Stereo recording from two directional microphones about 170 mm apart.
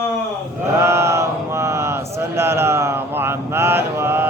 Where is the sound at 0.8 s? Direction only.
15° right (ahead or behind).